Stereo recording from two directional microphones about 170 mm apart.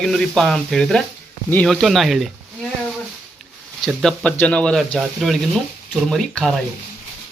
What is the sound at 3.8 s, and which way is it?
A man's voice, 5° left (ahead or behind).